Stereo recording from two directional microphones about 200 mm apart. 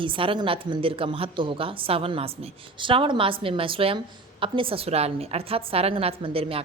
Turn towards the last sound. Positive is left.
turn(degrees=-30)  # may be behind; listen again after turning